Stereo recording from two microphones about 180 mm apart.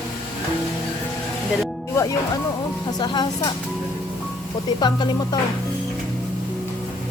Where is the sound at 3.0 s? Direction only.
25° left (ahead or behind).